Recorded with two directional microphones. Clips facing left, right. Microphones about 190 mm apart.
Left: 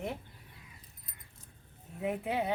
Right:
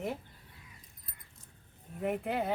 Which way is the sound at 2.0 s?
Centre (ahead or behind).